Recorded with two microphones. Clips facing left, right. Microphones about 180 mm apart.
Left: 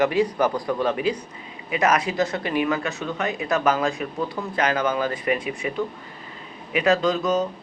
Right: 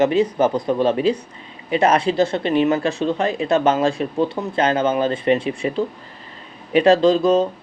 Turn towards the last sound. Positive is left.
turn(degrees=-30)  # may be behind; listen again after turning